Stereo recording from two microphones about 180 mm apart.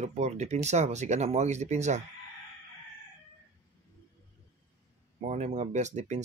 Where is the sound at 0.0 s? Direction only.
40° right (ahead or behind).